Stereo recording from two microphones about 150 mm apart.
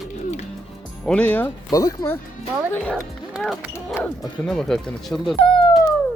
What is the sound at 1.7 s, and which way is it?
Speech, 25° left (ahead or behind).